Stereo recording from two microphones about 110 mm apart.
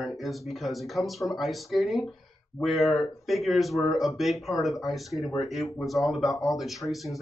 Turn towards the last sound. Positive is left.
turn(degrees=0)  # may be behind; listen again after turning